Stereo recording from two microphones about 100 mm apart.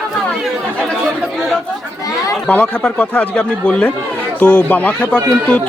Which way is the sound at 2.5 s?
15° left (ahead or behind).